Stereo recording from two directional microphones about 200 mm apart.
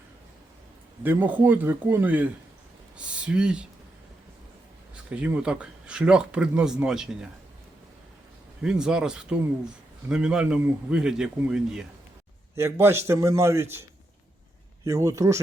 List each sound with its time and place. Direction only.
1.0 s a man's voice: 10° right (ahead or behind)
5.0 s speech: 5° right (ahead or behind)
8.6 s a man's voice: 5° right (ahead or behind)
14.8 s a man's voice: 15° right (ahead or behind)